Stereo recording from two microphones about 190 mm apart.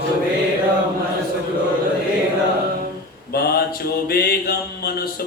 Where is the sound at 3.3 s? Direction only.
55° left (ahead or behind).